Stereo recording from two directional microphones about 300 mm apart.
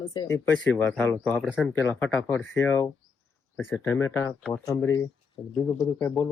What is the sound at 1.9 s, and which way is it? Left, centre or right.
A man's voice, centre.